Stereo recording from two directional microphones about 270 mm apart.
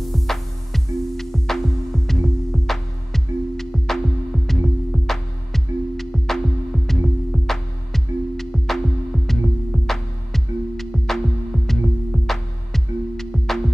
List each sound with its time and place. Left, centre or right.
0.0 s music: centre